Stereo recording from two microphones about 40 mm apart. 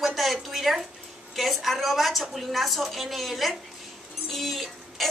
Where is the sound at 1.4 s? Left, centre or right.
Centre.